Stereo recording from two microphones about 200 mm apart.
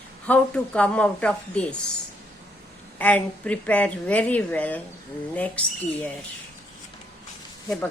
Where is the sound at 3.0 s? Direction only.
10° left (ahead or behind).